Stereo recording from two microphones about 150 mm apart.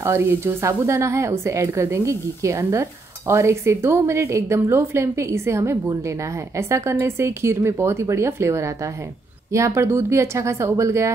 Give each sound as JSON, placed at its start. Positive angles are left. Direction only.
{"t": 0.0, "sound": "speech", "side_deg": -15}